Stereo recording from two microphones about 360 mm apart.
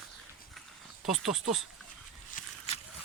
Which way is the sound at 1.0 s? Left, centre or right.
Centre.